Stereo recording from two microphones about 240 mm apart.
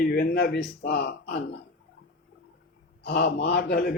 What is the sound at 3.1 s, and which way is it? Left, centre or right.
Speech, left.